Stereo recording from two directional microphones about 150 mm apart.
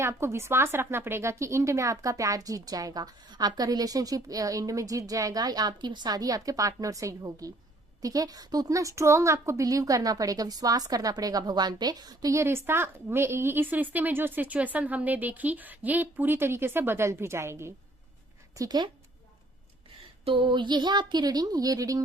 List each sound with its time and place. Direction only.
0.0 s a woman's voice: 15° right (ahead or behind)
20.2 s a woman's voice: 35° right (ahead or behind)